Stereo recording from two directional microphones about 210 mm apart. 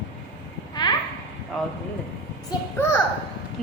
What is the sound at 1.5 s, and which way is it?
A woman's voice, centre (ahead or behind).